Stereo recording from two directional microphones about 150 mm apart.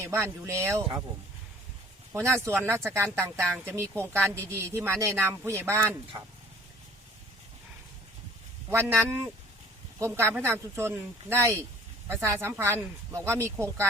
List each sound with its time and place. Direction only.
0.0 s speech: 20° right (ahead or behind)
2.1 s speech: 15° right (ahead or behind)
8.7 s speech: 15° right (ahead or behind)